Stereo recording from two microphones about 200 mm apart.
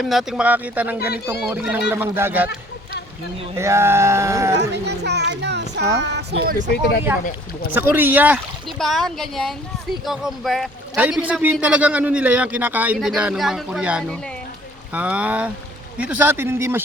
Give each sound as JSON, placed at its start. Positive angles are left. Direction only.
{"t": 0.0, "sound": "a man's voice", "side_deg": 0}
{"t": 3.6, "sound": "a man's voice", "side_deg": -15}
{"t": 4.7, "sound": "speech", "side_deg": -55}
{"t": 7.1, "sound": "a man's voice", "side_deg": -10}